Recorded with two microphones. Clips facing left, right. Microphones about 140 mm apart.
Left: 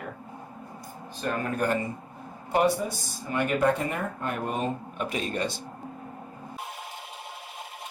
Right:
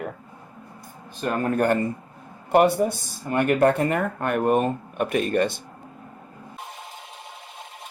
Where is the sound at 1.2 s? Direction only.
60° right (ahead or behind).